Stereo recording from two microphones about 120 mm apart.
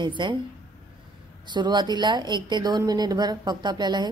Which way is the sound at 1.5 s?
40° right (ahead or behind).